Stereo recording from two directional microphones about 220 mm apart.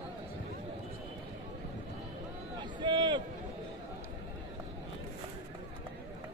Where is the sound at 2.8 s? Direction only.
20° right (ahead or behind).